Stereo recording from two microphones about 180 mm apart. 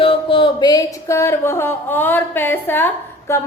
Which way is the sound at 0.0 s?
30° left (ahead or behind).